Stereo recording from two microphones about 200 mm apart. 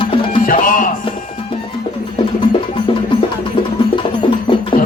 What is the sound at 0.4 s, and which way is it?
Music, 45° left (ahead or behind).